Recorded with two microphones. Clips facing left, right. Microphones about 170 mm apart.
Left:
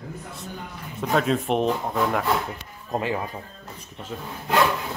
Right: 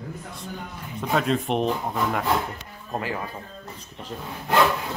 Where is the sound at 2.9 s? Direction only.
20° left (ahead or behind).